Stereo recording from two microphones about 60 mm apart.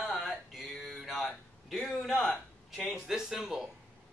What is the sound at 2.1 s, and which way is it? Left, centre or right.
Speech, left.